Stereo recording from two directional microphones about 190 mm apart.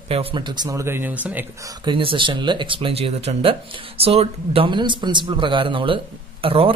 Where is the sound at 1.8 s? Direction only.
25° right (ahead or behind).